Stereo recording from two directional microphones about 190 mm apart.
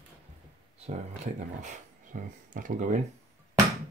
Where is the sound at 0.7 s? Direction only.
35° right (ahead or behind).